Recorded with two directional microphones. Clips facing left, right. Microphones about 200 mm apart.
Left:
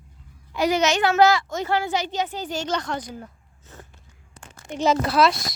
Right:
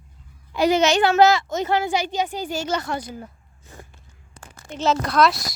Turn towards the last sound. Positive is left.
turn(degrees=0)  # may be behind; listen again after turning